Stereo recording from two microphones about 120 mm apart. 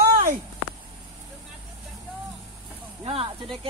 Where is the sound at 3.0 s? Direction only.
50° right (ahead or behind).